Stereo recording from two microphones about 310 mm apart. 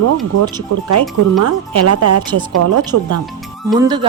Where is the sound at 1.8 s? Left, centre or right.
Right.